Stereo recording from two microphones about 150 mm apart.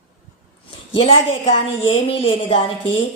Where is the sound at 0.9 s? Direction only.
40° left (ahead or behind).